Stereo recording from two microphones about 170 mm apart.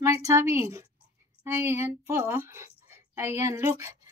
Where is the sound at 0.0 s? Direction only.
15° right (ahead or behind).